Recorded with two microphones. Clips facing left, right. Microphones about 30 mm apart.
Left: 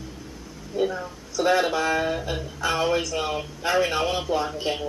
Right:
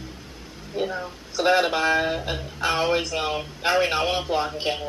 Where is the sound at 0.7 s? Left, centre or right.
Right.